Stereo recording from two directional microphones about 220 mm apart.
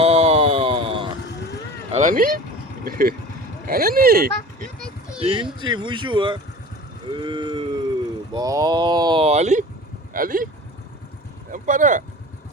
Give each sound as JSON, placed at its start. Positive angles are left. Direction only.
{"t": 0.0, "sound": "a sound", "side_deg": -30}
{"t": 1.9, "sound": "vehicle", "side_deg": -35}
{"t": 2.8, "sound": "speech", "side_deg": -40}
{"t": 5.2, "sound": "speech", "side_deg": -20}
{"t": 7.1, "sound": "a sound", "side_deg": -20}
{"t": 8.3, "sound": "speech", "side_deg": -15}
{"t": 11.5, "sound": "speech", "side_deg": -35}